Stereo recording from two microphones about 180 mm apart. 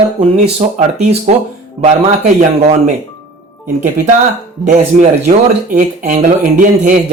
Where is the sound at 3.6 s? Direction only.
45° right (ahead or behind).